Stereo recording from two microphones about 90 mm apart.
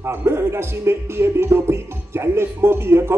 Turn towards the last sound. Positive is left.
turn(degrees=-30)  # may be behind; listen again after turning